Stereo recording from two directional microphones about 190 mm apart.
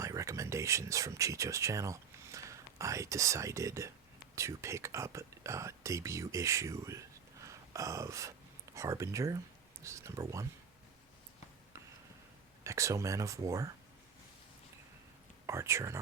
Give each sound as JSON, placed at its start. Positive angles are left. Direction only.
{"t": 0.0, "sound": "speech", "side_deg": -15}
{"t": 7.4, "sound": "a sound", "side_deg": -15}
{"t": 8.7, "sound": "speech", "side_deg": -15}
{"t": 12.6, "sound": "speech", "side_deg": -15}
{"t": 15.4, "sound": "speech", "side_deg": -15}